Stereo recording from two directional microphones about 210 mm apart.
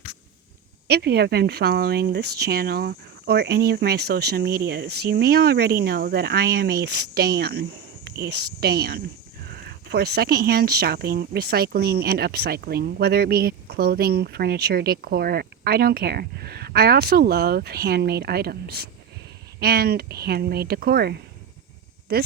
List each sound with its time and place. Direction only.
0.9 s speech: 50° right (ahead or behind)